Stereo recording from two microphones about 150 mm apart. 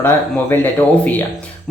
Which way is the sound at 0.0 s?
10° left (ahead or behind).